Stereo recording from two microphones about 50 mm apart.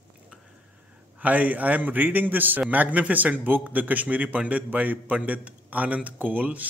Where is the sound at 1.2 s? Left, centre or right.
Right.